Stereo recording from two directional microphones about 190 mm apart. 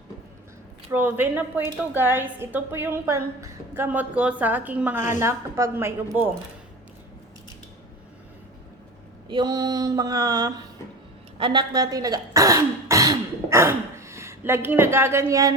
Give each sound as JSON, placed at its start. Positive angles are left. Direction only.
{"t": 0.9, "sound": "a woman's voice", "side_deg": -10}
{"t": 9.3, "sound": "female singing", "side_deg": -20}
{"t": 11.3, "sound": "speech", "side_deg": -25}